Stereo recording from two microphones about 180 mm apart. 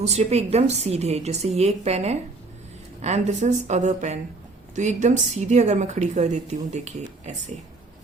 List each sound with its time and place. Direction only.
0.1 s a woman's voice: 35° right (ahead or behind)